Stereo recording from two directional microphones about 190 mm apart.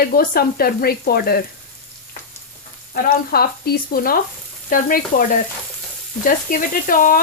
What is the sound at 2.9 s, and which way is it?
Speech, 55° left (ahead or behind).